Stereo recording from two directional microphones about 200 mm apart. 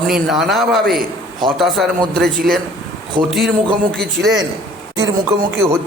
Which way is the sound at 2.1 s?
50° right (ahead or behind).